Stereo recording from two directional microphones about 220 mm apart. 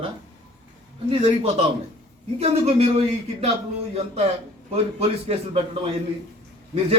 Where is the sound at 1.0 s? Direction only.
25° right (ahead or behind).